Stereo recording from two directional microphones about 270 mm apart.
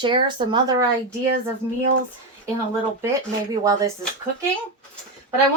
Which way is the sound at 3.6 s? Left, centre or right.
Centre.